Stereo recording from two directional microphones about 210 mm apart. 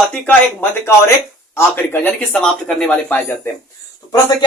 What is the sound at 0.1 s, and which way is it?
Speech, 10° left (ahead or behind).